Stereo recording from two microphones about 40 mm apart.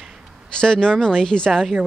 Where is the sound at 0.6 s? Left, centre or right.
Centre.